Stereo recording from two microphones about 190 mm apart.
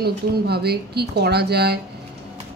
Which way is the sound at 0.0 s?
55° right (ahead or behind).